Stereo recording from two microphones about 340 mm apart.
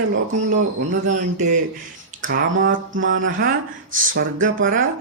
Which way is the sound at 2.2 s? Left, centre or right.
Right.